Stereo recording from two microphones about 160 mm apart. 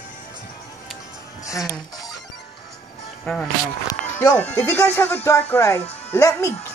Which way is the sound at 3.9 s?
20° left (ahead or behind).